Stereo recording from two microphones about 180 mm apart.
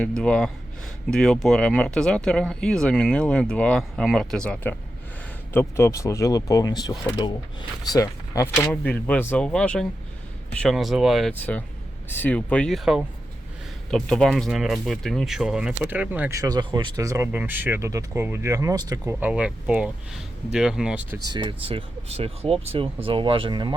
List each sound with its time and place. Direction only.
0.0 s speech: 5° left (ahead or behind)
8.7 s speech: 10° left (ahead or behind); by 16.4 s 10° right (ahead or behind)
16.4 s speech: 20° right (ahead or behind)
19.2 s speech: 5° right (ahead or behind)
21.2 s speech: 25° right (ahead or behind)